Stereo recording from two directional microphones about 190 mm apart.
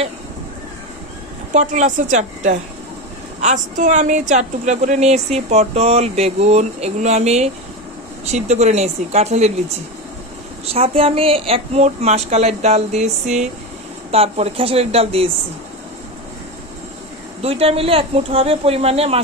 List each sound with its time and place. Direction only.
1.5 s speech: 40° right (ahead or behind)
10.6 s speech: 30° right (ahead or behind)
17.4 s speech: 30° right (ahead or behind)